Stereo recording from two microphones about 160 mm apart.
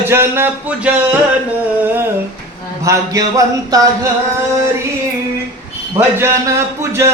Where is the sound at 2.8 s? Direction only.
20° right (ahead or behind).